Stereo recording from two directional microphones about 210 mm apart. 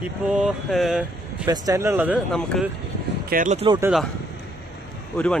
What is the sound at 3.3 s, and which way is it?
Speech, 40° right (ahead or behind).